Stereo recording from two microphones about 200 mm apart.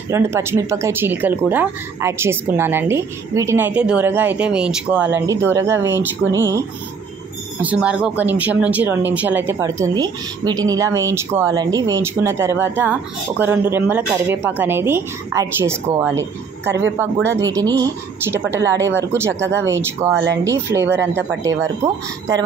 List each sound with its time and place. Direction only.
0.1 s speech: 15° right (ahead or behind)
7.6 s speech: 5° right (ahead or behind)
20.8 s speech: 60° right (ahead or behind)
21.4 s speech: 15° right (ahead or behind)